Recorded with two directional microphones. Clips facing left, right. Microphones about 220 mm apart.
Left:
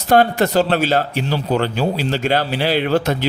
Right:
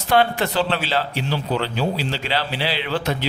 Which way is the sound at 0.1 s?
45° left (ahead or behind).